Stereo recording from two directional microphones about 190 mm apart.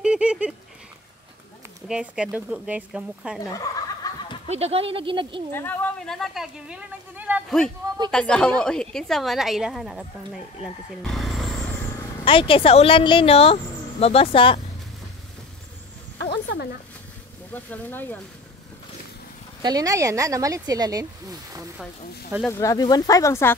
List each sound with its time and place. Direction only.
0.0 s a sound: 5° right (ahead or behind)
1.9 s a woman's voice: 5° right (ahead or behind)
3.5 s a sound: 20° left (ahead or behind)
4.5 s speech: 35° right (ahead or behind)
5.5 s a woman's voice: 10° left (ahead or behind); by 7.5 s 10° right (ahead or behind)
8.1 s a woman's voice: 5° left (ahead or behind)
12.3 s speech: 25° left (ahead or behind)
16.3 s a sound: 60° left (ahead or behind)
17.5 s speech: 10° left (ahead or behind)
19.6 s speech: 20° right (ahead or behind)
22.5 s speech: 15° left (ahead or behind)